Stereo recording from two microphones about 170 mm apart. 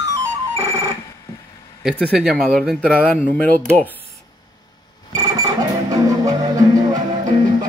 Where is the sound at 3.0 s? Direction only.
10° left (ahead or behind).